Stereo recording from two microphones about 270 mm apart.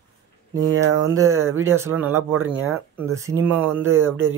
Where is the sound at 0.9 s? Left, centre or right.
Centre.